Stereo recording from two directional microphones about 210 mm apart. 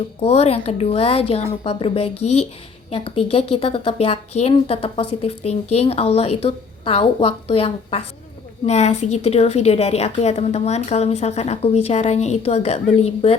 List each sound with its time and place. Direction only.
0.2 s a woman's voice: 30° left (ahead or behind)